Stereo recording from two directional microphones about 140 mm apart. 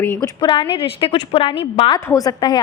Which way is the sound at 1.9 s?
25° left (ahead or behind).